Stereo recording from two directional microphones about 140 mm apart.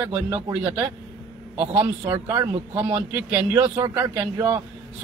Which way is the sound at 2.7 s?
40° right (ahead or behind).